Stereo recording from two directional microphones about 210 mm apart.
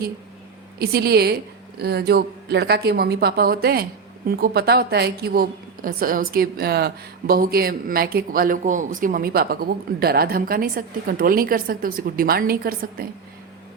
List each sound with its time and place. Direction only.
0.8 s a woman's voice: 50° right (ahead or behind)